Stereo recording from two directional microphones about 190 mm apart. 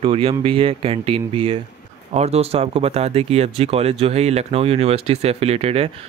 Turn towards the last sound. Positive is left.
turn(degrees=-30)  # may be behind; listen again after turning